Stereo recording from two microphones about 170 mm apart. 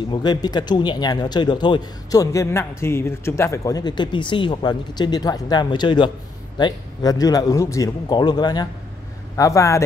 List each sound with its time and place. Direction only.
0.1 s speech: 25° left (ahead or behind)